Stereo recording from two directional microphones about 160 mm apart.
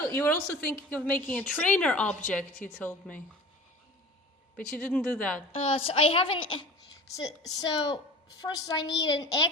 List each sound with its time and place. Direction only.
0.1 s a woman's voice: 10° left (ahead or behind)
4.5 s a woman's voice: 10° left (ahead or behind)
5.5 s a woman's voice: 35° left (ahead or behind)